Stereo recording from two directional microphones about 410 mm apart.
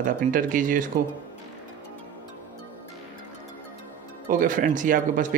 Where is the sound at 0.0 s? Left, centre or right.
Centre.